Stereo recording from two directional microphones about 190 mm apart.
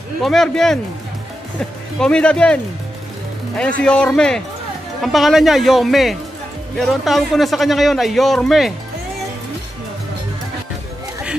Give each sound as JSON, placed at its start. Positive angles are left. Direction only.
{"t": 0.2, "sound": "a man's voice", "side_deg": 0}
{"t": 2.0, "sound": "a man's voice", "side_deg": 5}